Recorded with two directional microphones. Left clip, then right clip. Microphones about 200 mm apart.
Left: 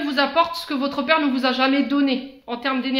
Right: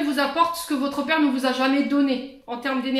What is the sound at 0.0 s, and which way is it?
A woman's voice, 40° left (ahead or behind).